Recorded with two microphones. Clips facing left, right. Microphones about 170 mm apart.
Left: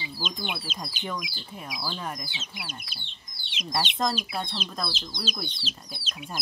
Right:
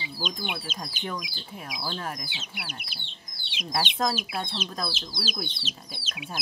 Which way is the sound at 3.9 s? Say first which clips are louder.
Even; 5° right (ahead or behind).